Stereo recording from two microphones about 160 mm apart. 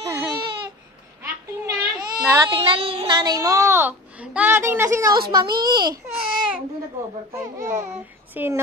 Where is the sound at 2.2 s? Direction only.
15° right (ahead or behind).